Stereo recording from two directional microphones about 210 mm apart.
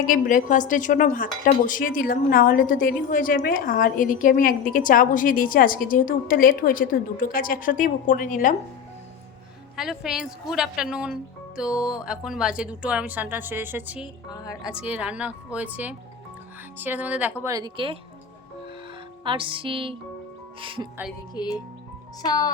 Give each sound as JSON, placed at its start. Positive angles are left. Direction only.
{"t": 0.1, "sound": "speech", "side_deg": 40}
{"t": 9.7, "sound": "speech", "side_deg": 0}
{"t": 14.3, "sound": "speech", "side_deg": 15}
{"t": 14.7, "sound": "speech", "side_deg": -5}
{"t": 17.4, "sound": "speech", "side_deg": -20}
{"t": 19.2, "sound": "speech", "side_deg": -25}
{"t": 21.4, "sound": "speech", "side_deg": 20}